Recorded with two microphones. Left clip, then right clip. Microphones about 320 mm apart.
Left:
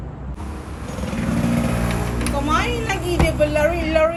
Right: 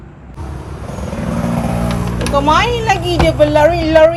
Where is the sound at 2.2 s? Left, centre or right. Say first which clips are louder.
Right 10 dB; centre.